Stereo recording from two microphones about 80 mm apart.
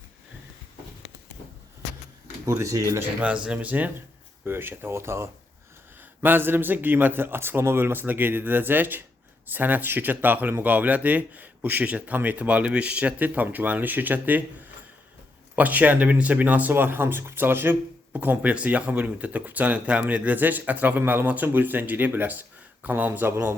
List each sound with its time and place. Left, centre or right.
2.5 s speech: right
3.0 s speech: centre
15.5 s speech: right